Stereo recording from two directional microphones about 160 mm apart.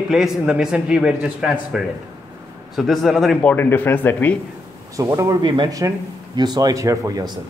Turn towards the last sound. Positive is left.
turn(degrees=-20)  # may be behind; listen again after turning